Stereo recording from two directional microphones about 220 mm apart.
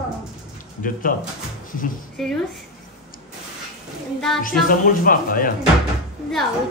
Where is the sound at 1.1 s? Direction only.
40° left (ahead or behind).